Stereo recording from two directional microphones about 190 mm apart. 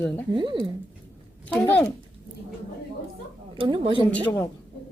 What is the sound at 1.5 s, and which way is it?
Speech, 5° left (ahead or behind).